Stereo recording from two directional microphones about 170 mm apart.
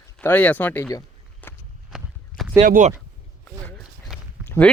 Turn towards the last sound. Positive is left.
turn(degrees=10)  # may be behind; listen again after turning